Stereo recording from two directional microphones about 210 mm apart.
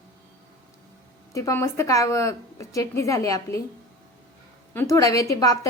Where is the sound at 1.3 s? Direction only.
15° left (ahead or behind).